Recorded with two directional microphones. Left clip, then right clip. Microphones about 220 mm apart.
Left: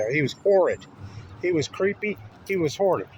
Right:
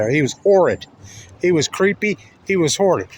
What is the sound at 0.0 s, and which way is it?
Speech, 45° right (ahead or behind).